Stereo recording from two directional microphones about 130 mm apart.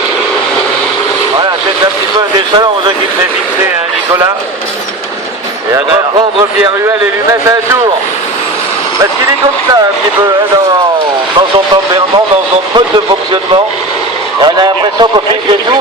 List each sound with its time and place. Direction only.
2.1 s speech: 35° right (ahead or behind)
11.3 s speech: 35° right (ahead or behind)
14.4 s speech: 35° right (ahead or behind)